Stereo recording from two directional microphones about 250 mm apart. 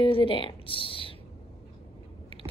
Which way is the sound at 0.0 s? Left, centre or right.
Left.